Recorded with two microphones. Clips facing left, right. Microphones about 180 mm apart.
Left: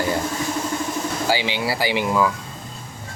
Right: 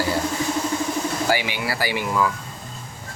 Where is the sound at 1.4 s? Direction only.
20° left (ahead or behind).